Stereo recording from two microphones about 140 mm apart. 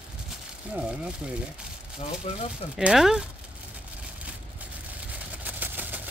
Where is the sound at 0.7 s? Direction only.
10° right (ahead or behind).